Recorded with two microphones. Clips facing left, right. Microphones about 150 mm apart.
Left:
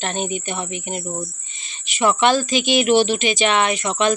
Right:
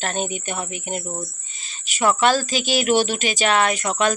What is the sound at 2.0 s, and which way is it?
A woman's voice, 40° right (ahead or behind).